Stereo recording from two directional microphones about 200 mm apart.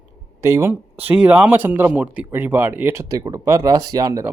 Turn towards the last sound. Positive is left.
turn(degrees=-15)  # may be behind; listen again after turning